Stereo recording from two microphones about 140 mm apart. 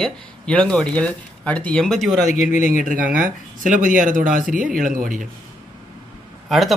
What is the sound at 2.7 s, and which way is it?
Speech, 75° right (ahead or behind).